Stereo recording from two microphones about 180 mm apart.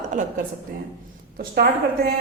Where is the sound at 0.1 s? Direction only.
45° right (ahead or behind).